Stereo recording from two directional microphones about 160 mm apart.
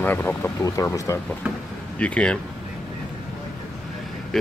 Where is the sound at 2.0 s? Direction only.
5° left (ahead or behind).